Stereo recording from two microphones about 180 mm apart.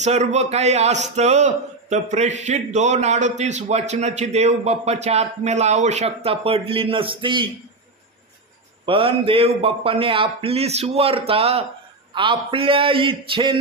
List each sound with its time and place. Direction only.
0.0 s speech: 40° right (ahead or behind)
8.8 s a man's voice: 30° right (ahead or behind)